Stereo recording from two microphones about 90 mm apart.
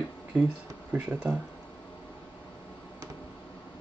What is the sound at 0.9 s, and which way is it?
Speech, 15° right (ahead or behind).